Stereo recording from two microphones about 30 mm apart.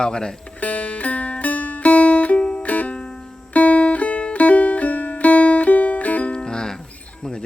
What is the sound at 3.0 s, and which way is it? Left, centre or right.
Music, left.